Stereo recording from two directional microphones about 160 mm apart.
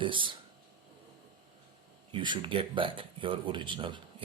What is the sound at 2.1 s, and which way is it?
Speech, 30° right (ahead or behind).